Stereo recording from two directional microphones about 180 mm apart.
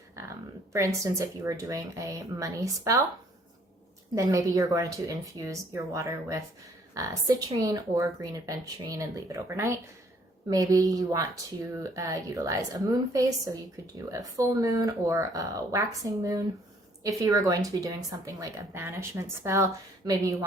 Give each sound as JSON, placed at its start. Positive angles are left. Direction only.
{"t": 0.2, "sound": "a woman's voice", "side_deg": -15}
{"t": 4.1, "sound": "speech", "side_deg": -15}